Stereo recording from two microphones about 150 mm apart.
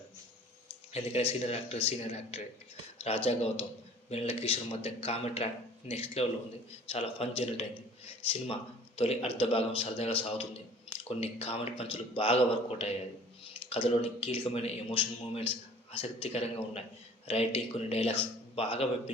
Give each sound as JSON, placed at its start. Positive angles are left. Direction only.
{"t": 0.9, "sound": "speech", "side_deg": 45}
{"t": 10.9, "sound": "drip", "side_deg": 40}
{"t": 11.2, "sound": "speech", "side_deg": 40}